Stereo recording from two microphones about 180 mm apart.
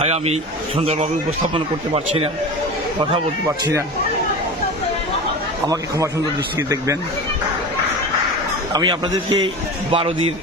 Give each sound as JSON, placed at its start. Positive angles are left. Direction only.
{"t": 0.0, "sound": "speech", "side_deg": -35}
{"t": 1.5, "sound": "speech", "side_deg": -35}
{"t": 3.6, "sound": "speech", "side_deg": -15}
{"t": 5.6, "sound": "a man's voice", "side_deg": -20}
{"t": 8.7, "sound": "a man's voice", "side_deg": -25}